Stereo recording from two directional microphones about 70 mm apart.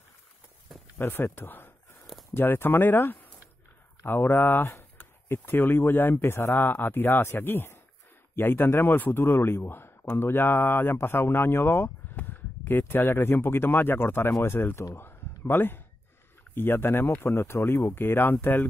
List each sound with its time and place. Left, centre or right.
0.9 s a man's voice: left
15.0 s a sound: left
16.5 s a man's voice: left